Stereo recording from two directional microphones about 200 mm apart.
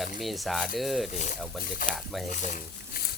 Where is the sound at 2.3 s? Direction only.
40° left (ahead or behind).